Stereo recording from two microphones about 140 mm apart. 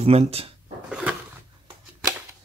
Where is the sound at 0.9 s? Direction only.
5° right (ahead or behind).